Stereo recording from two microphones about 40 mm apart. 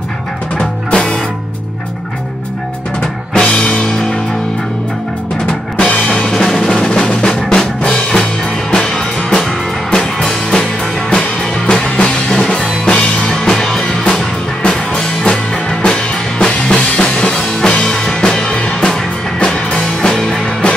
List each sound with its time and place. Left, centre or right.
0.9 s music: centre
3.0 s drum kit: left
5.8 s drum kit: left
6.5 s music: centre
7.1 s music: centre
10.2 s music: centre
11.1 s music: left
13.3 s music: centre